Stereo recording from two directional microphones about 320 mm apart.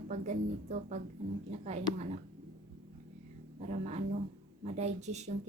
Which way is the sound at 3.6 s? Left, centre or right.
Right.